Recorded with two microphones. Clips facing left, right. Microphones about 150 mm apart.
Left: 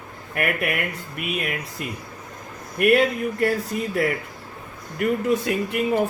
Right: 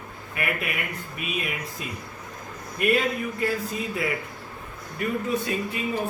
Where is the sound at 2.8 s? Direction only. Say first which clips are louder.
Left 5 dB; 65° left (ahead or behind).